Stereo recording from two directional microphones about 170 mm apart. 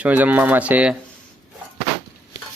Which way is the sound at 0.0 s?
10° right (ahead or behind).